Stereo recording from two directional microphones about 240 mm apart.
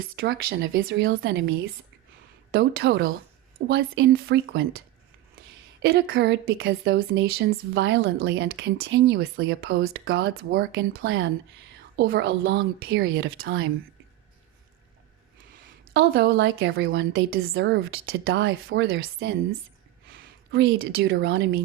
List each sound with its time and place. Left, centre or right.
0.0 s a woman's voice: right
5.8 s a woman's voice: right
11.9 s a woman's voice: right
13.0 s speech: right
15.8 s a woman's voice: right
16.6 s speech: right
17.3 s speech: right